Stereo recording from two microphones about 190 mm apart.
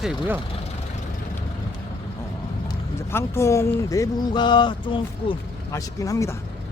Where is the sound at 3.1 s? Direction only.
15° left (ahead or behind).